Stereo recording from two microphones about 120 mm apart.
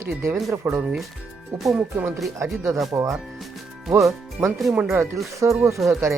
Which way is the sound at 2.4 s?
25° right (ahead or behind).